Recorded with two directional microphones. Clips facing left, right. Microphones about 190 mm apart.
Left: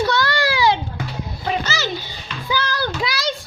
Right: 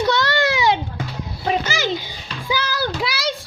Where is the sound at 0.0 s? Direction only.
20° right (ahead or behind).